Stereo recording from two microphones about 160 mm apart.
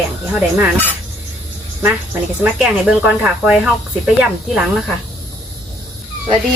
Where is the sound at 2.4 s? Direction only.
5° right (ahead or behind).